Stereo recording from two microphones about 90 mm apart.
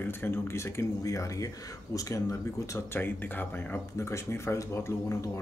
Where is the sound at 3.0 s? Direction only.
20° left (ahead or behind).